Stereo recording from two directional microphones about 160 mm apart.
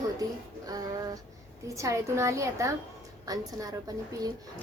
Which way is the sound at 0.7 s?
25° right (ahead or behind).